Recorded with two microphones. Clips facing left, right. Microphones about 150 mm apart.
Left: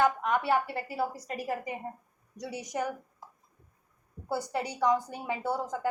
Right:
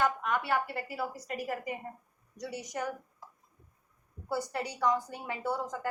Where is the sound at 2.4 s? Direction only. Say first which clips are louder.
Left 1 dB; 10° left (ahead or behind).